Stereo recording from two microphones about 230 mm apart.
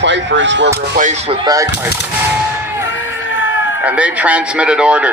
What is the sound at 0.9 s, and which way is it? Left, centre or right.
Speech, right.